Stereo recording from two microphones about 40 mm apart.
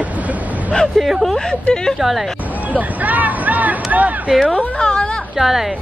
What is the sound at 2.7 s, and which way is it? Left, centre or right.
Speech, right.